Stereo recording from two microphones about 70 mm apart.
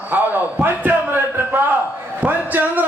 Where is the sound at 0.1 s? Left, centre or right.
Right.